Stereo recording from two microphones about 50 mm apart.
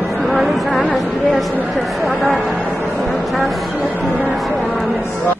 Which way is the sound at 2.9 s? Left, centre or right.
Centre.